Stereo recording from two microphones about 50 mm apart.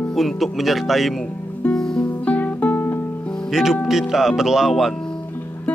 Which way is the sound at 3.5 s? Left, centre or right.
Centre.